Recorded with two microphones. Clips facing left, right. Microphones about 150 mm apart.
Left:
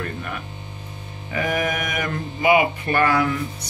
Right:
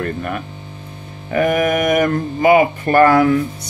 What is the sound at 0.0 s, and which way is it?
Speech, 50° right (ahead or behind).